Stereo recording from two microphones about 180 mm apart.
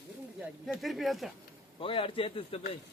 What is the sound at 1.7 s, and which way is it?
Speech, 30° left (ahead or behind).